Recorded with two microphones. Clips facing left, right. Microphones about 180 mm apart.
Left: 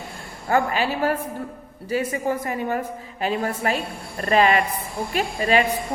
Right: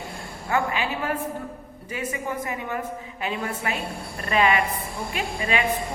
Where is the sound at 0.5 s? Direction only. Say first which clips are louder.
Left 4 dB; 40° left (ahead or behind).